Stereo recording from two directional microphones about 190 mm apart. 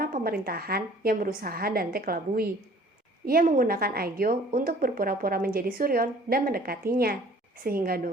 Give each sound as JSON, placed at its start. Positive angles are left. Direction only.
{"t": 0.0, "sound": "a woman's voice", "side_deg": -50}